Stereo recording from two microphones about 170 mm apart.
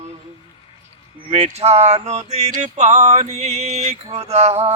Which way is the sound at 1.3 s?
40° right (ahead or behind).